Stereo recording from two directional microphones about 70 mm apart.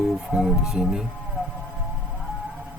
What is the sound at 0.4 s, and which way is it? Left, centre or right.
Speech, centre.